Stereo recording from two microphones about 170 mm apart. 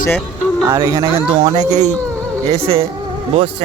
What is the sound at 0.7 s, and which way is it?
Speech, 15° right (ahead or behind).